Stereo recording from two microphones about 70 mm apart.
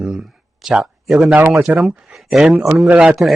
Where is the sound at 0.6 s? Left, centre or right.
Centre.